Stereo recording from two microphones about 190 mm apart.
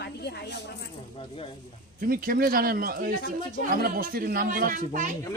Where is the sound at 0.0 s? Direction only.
60° left (ahead or behind).